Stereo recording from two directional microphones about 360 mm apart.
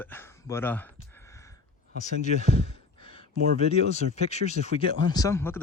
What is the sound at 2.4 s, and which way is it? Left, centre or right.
Sigh, centre.